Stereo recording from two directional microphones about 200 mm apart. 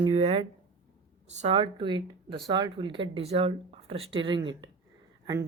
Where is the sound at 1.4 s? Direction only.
30° right (ahead or behind).